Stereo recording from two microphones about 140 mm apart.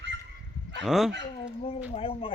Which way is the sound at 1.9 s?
40° left (ahead or behind).